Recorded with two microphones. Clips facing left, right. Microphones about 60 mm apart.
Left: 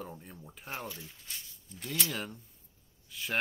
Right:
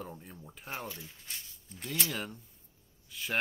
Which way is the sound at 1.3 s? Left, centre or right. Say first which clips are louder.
Even; right.